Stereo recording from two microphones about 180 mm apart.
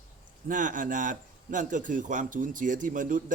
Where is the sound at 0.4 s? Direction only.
45° right (ahead or behind).